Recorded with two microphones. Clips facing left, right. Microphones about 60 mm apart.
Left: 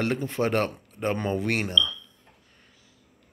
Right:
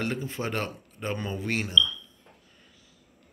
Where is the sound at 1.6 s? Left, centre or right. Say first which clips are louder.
Even; left.